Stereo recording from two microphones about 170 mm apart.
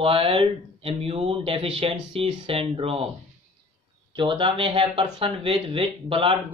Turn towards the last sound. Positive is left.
turn(degrees=-30)  # may be behind; listen again after turning